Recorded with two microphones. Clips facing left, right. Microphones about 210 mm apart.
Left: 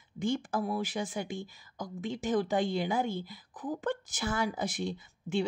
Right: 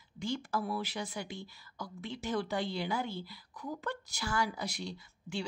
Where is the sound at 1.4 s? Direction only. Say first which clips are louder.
Left 4 dB; 45° left (ahead or behind).